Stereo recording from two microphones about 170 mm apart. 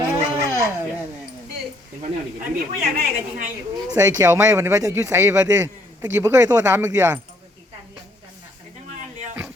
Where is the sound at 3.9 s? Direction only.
20° right (ahead or behind).